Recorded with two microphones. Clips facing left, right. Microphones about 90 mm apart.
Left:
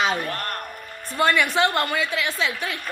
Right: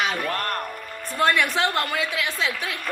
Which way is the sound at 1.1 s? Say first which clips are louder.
Left 1 dB; centre (ahead or behind).